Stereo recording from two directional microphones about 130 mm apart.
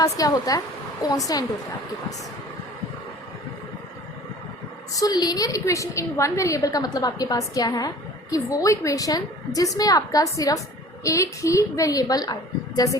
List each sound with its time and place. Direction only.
0.0 s a woman's voice: 30° left (ahead or behind)
4.9 s a woman's voice: 30° left (ahead or behind)